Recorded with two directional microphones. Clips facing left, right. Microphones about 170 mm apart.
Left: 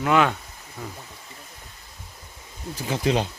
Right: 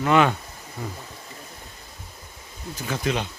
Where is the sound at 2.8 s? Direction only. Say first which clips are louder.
Left 3 dB; 30° left (ahead or behind).